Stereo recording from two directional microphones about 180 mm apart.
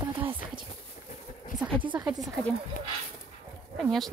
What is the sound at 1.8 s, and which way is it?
Speech, 25° right (ahead or behind).